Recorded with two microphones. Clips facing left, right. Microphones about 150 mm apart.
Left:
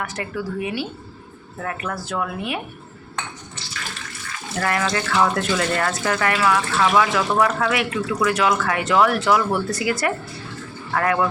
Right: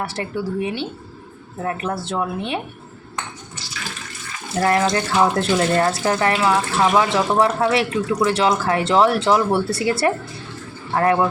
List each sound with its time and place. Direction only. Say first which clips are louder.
0.0 s speech: right 3 dB; 30° right (ahead or behind)
4.6 s speech: right 5 dB; 30° right (ahead or behind)